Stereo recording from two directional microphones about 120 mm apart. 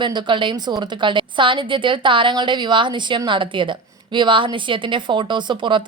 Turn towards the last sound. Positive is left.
turn(degrees=-40)  # may be behind; listen again after turning